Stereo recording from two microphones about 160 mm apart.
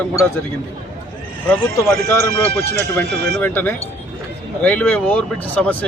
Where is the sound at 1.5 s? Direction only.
15° left (ahead or behind).